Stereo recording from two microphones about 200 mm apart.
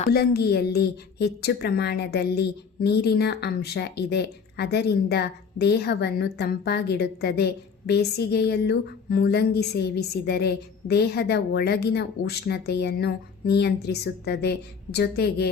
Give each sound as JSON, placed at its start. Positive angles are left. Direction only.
{"t": 0.0, "sound": "a woman's voice", "side_deg": 50}